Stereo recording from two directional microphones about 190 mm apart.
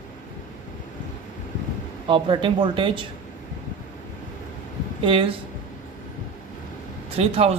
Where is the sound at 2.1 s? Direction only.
25° right (ahead or behind).